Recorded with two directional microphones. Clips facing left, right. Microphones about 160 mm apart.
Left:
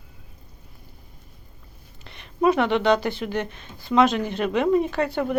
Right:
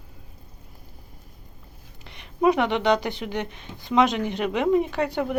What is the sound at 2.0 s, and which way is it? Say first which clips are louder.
Speech: even; 15° right (ahead or behind).